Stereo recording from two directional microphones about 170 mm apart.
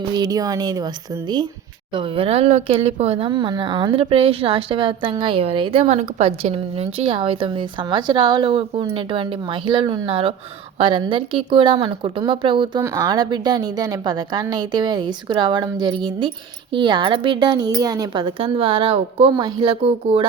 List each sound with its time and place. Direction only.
0.1 s speech: 20° right (ahead or behind)
1.9 s speech: 30° right (ahead or behind)
12.8 s speech: 20° right (ahead or behind); by 20.2 s 35° right (ahead or behind)